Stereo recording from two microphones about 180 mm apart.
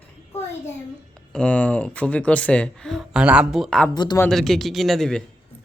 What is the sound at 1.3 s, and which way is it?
Speech, 5° left (ahead or behind).